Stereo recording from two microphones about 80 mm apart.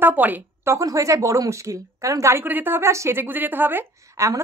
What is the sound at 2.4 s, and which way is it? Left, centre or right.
A woman's voice, right.